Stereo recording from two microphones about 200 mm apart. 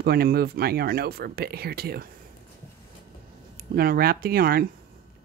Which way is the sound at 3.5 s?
50° right (ahead or behind).